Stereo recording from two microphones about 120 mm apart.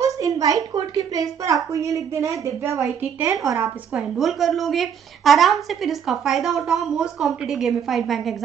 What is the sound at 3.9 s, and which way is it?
A woman's voice, centre (ahead or behind).